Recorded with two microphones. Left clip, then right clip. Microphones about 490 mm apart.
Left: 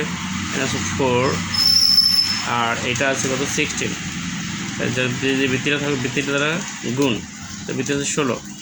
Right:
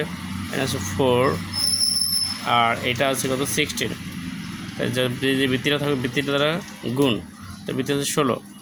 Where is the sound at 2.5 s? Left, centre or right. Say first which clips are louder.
Right 1 dB; right.